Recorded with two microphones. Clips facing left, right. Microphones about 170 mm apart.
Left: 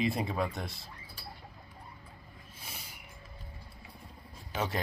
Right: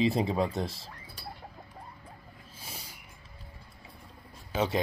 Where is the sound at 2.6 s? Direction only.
35° right (ahead or behind).